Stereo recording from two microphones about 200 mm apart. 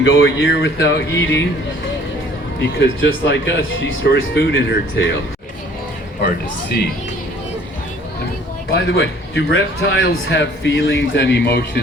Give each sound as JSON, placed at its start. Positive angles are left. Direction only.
{"t": 0.0, "sound": "a man's voice", "side_deg": 70}
{"t": 2.6, "sound": "a man's voice", "side_deg": 60}
{"t": 9.0, "sound": "a man's voice", "side_deg": 70}